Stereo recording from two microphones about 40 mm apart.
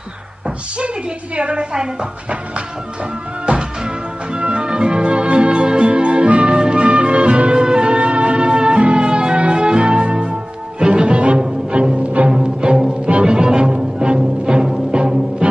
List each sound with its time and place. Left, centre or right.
0.7 s a woman's voice: right
3.4 s music: right